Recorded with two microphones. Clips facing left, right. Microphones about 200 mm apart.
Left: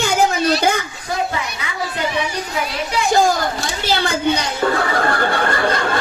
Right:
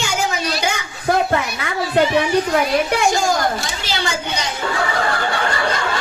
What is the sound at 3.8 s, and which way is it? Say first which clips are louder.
Snicker: left 10 dB; 55° left (ahead or behind).